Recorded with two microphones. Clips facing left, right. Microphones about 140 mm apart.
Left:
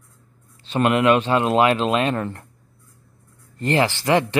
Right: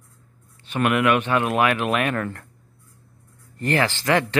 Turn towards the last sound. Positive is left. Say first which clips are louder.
# left 2 dB
turn(degrees=20)  # may be behind; listen again after turning